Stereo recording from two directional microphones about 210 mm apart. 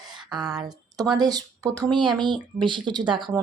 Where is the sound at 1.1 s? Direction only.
20° right (ahead or behind).